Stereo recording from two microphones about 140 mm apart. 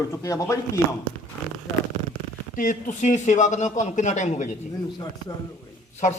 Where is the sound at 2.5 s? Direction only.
70° left (ahead or behind).